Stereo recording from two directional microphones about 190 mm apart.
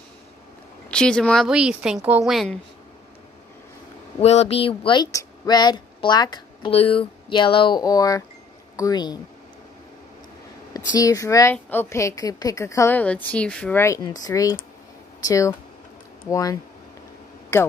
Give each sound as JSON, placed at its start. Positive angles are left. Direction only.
{"t": 0.8, "sound": "speech", "side_deg": 5}
{"t": 4.2, "sound": "speech", "side_deg": 35}
{"t": 10.7, "sound": "a woman's voice", "side_deg": 20}